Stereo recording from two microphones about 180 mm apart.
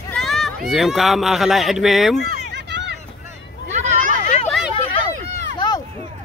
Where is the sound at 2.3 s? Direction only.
70° right (ahead or behind).